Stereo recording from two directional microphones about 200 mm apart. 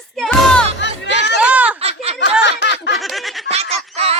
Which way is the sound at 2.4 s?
60° left (ahead or behind).